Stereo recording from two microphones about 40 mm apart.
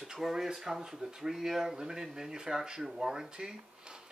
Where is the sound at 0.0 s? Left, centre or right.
Centre.